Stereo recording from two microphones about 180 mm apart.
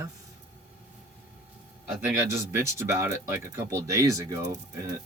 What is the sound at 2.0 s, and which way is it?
Speech, 15° right (ahead or behind).